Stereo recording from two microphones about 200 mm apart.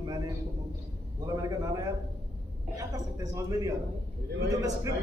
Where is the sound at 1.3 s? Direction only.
15° right (ahead or behind).